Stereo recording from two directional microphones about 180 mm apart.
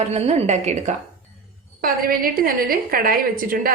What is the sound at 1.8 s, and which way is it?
A woman's voice, 50° right (ahead or behind).